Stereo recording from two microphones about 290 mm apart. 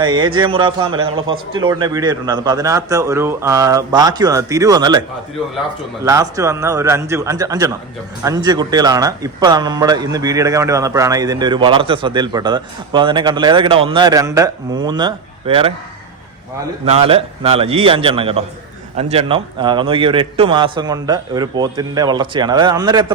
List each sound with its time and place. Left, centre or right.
0.0 s speech: centre
6.1 s speech: centre
16.8 s a man's voice: centre